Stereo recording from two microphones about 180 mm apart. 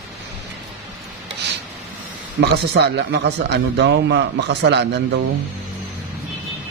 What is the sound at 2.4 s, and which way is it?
Speech, 70° right (ahead or behind).